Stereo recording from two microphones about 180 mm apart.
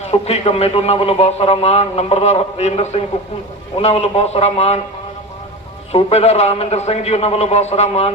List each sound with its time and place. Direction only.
0.1 s speech: 35° left (ahead or behind)
5.9 s speech: 35° left (ahead or behind)